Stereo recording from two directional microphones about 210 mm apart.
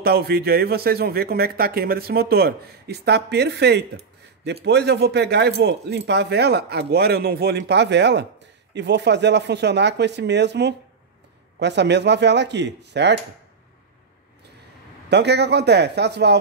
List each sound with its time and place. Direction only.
0.0 s speech: 50° right (ahead or behind)
15.0 s speech: 55° right (ahead or behind)